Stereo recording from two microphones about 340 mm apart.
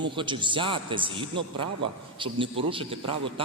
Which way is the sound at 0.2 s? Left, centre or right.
Centre.